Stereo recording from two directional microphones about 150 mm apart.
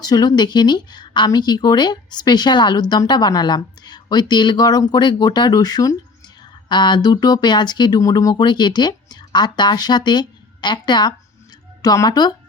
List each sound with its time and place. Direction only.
0.0 s speech: 25° left (ahead or behind)